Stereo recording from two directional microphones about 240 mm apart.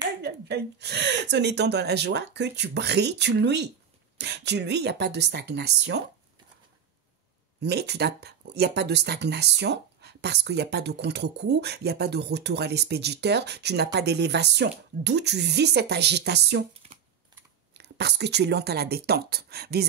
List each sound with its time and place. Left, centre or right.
0.2 s speech: right
7.6 s speech: right
17.7 s speech: right